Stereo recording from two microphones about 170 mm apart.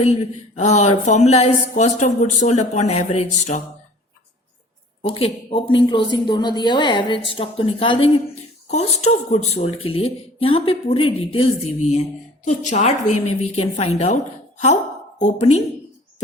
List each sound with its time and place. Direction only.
0.0 s speech: 40° left (ahead or behind)
5.0 s speech: 35° left (ahead or behind)
15.2 s speech: 40° left (ahead or behind)